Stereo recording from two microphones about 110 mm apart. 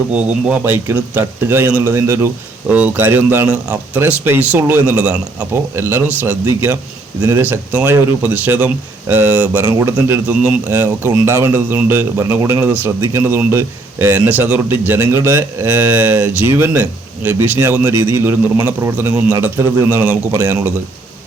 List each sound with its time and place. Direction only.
0.1 s speech: 10° right (ahead or behind)
2.6 s a man's voice: 15° right (ahead or behind)
7.7 s a man's voice: 15° right (ahead or behind)